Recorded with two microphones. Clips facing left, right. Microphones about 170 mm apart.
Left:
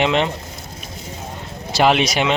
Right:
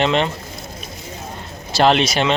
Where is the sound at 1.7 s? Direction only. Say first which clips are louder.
Right 1 dB; 10° left (ahead or behind).